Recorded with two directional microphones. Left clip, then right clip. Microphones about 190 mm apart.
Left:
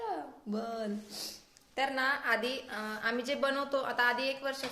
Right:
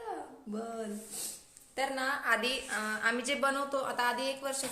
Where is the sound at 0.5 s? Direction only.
40° left (ahead or behind).